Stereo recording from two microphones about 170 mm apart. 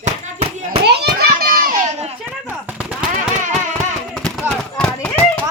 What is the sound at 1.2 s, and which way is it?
Children playing, 60° right (ahead or behind).